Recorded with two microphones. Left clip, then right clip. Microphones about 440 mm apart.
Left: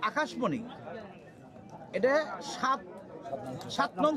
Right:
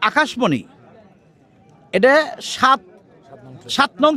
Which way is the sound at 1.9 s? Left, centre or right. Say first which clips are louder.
Right 14 dB; right.